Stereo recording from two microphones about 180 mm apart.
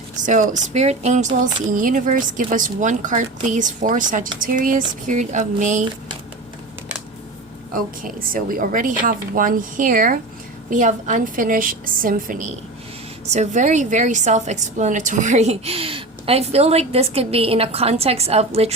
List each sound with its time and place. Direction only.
0.2 s a woman's voice: 45° right (ahead or behind)
7.7 s a woman's voice: 50° right (ahead or behind)